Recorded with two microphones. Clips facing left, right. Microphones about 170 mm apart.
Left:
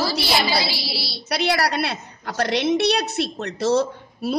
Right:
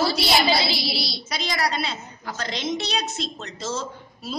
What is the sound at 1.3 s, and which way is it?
A woman's voice, 65° left (ahead or behind).